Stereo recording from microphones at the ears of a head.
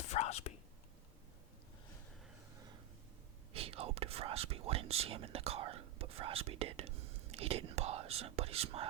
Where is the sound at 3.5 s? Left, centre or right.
Right.